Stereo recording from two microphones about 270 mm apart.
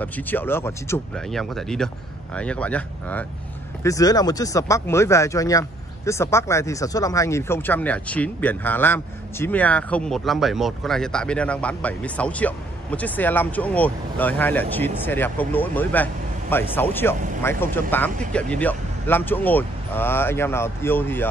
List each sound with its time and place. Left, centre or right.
0.0 s speech: centre